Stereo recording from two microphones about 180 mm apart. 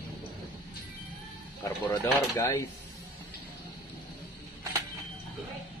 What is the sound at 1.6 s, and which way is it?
Speech, 15° left (ahead or behind).